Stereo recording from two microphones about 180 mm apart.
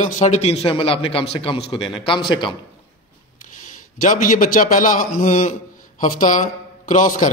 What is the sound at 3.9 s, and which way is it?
A man's voice, 50° left (ahead or behind).